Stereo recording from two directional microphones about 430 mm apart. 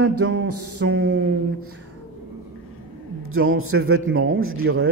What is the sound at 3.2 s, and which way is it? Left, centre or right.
Speech, right.